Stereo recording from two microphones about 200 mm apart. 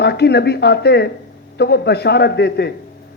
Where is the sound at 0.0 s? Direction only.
55° left (ahead or behind).